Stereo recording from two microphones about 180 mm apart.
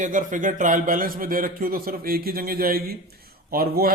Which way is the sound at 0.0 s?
45° right (ahead or behind).